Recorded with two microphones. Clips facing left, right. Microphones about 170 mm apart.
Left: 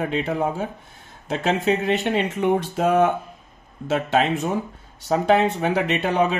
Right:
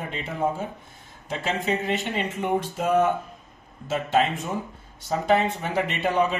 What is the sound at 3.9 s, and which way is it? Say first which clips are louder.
Speech: left 3 dB; 70° left (ahead or behind).